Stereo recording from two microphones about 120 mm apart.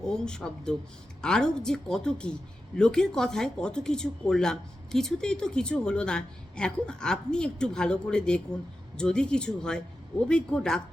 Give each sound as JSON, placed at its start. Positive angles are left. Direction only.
{"t": 0.0, "sound": "speech", "side_deg": 5}